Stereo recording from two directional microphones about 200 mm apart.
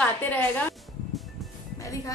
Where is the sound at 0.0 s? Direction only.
10° left (ahead or behind).